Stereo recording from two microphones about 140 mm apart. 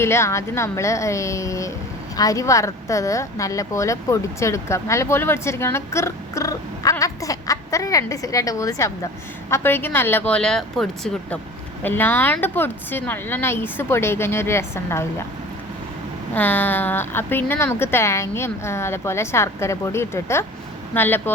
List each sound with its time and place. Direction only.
0.0 s a woman's voice: 20° left (ahead or behind); by 11.3 s centre (ahead or behind)
11.8 s speech: 15° left (ahead or behind)
16.3 s speech: 15° left (ahead or behind)